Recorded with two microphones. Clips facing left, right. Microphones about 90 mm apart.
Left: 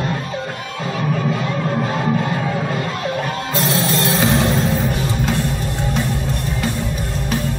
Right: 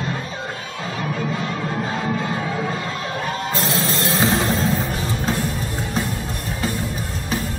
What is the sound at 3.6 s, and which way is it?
Music, 35° left (ahead or behind).